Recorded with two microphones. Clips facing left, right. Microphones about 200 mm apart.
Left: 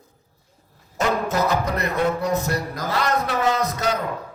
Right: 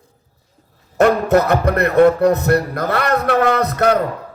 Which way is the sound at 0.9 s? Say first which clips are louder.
Right 9 dB; 60° right (ahead or behind).